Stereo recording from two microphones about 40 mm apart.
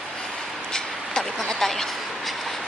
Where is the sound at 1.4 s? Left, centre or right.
Centre.